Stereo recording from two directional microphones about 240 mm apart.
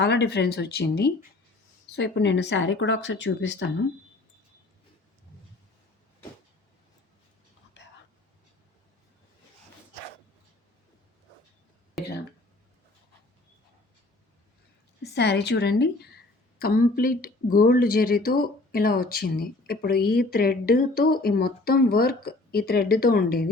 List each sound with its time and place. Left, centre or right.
0.0 s speech: left
7.8 s whispering: left
15.0 s a woman's voice: left